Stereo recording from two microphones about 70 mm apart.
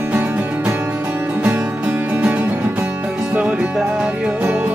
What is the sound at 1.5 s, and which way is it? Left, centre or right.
Music, right.